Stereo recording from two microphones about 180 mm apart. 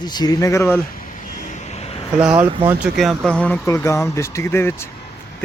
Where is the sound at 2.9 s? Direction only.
Centre (ahead or behind).